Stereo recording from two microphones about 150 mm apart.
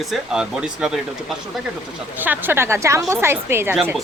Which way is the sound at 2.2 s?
15° right (ahead or behind).